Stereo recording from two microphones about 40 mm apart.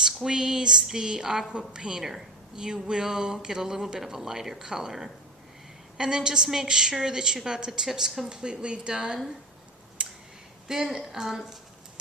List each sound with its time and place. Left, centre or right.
0.0 s a woman's voice: centre
8.3 s speech: right
10.0 s a sound: right
10.7 s a woman's voice: centre